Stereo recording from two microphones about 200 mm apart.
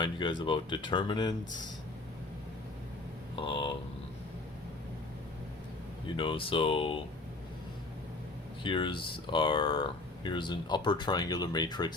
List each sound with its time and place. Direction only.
0.0 s speech: 25° left (ahead or behind)
3.3 s speech: 25° left (ahead or behind)
6.1 s speech: 25° left (ahead or behind)
8.6 s speech: 25° left (ahead or behind)